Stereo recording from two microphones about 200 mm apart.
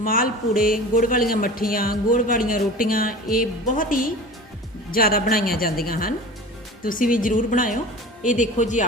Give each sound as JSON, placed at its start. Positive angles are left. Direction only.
{"t": 0.0, "sound": "a man's voice", "side_deg": 45}